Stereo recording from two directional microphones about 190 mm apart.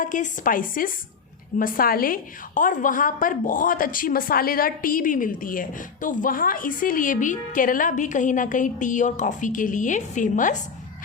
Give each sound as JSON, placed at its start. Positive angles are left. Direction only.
{"t": 0.0, "sound": "a woman's voice", "side_deg": 45}